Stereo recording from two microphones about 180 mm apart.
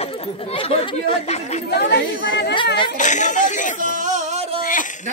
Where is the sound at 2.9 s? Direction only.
45° left (ahead or behind).